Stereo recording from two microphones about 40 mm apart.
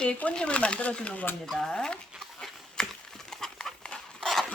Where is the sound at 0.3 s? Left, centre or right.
Left.